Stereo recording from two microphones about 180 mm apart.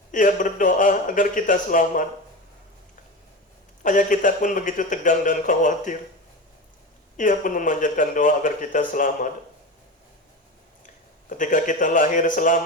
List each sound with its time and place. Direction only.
0.1 s speech: 45° left (ahead or behind)
3.8 s speech: 45° left (ahead or behind)
7.2 s speech: 45° left (ahead or behind)
11.3 s speech: 45° left (ahead or behind)